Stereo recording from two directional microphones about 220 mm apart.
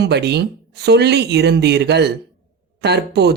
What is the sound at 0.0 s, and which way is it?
Speech, 50° right (ahead or behind).